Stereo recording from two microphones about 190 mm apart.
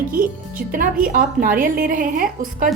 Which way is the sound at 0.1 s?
50° right (ahead or behind).